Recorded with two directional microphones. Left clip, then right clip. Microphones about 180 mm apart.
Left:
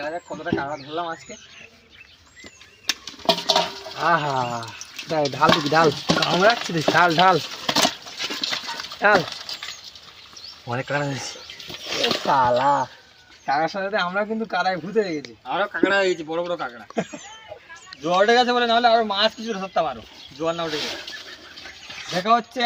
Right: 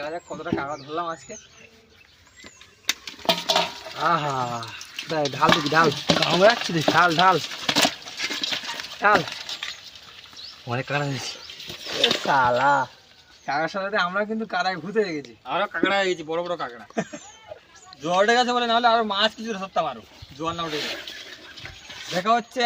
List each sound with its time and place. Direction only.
0.0 s a man's voice: centre (ahead or behind)
2.8 s a sound: 5° right (ahead or behind)
3.6 s speech: 5° left (ahead or behind)
6.2 s speech: 25° right (ahead or behind)
6.9 s speech: 10° left (ahead or behind)
7.9 s a sound: 15° right (ahead or behind)
9.0 s speech: 15° left (ahead or behind)
10.7 s speech: 25° right (ahead or behind)
11.7 s a man's voice: centre (ahead or behind)
16.9 s a man's voice: centre (ahead or behind)
22.1 s a man's voice: centre (ahead or behind)